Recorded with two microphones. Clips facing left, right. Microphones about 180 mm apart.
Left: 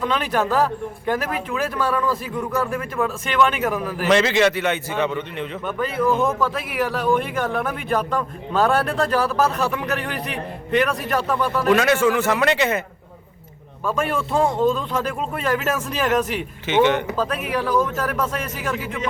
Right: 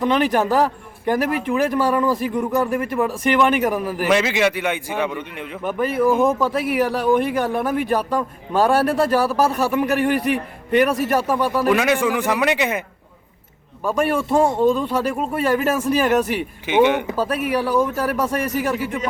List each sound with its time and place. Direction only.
0.0 s speech: 15° right (ahead or behind)
13.8 s speech: 10° right (ahead or behind)